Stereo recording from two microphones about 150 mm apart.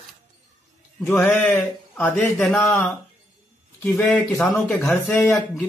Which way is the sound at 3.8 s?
5° left (ahead or behind).